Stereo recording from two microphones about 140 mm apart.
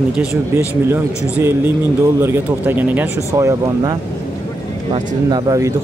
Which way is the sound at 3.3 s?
25° right (ahead or behind).